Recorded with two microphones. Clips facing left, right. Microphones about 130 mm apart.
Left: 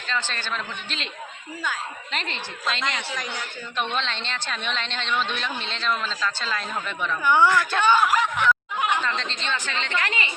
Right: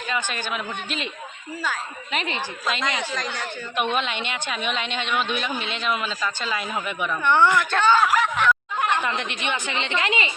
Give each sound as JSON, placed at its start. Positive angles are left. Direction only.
{"t": 0.1, "sound": "a man's voice", "side_deg": -15}
{"t": 3.9, "sound": "a man's voice", "side_deg": -10}
{"t": 7.3, "sound": "speech", "side_deg": 5}
{"t": 9.0, "sound": "a man's voice", "side_deg": -15}